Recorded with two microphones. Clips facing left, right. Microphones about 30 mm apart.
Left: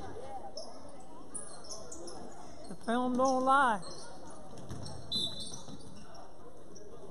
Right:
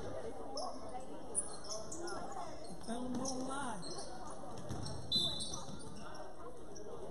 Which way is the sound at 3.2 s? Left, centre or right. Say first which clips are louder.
Left 13 dB; centre.